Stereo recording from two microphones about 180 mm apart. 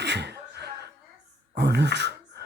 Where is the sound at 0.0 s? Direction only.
70° right (ahead or behind).